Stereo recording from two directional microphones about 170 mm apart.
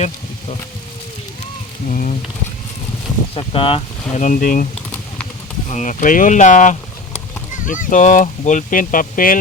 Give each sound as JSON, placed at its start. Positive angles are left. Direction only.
{"t": 1.9, "sound": "speech", "side_deg": 50}
{"t": 3.3, "sound": "speech", "side_deg": 35}
{"t": 4.2, "sound": "speech", "side_deg": 50}